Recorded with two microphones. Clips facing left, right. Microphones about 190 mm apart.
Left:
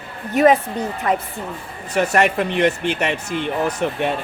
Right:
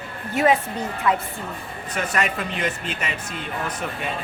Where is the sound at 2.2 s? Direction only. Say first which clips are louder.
Left 8 dB; 65° left (ahead or behind).